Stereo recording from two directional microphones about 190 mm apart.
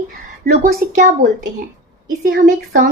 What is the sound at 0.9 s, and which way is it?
Speech, 40° right (ahead or behind).